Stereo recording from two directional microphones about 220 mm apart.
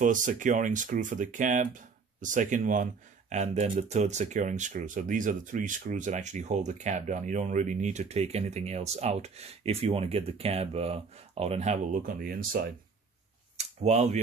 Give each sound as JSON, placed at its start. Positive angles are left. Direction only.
{"t": 0.0, "sound": "speech", "side_deg": -35}
{"t": 13.6, "sound": "speech", "side_deg": -30}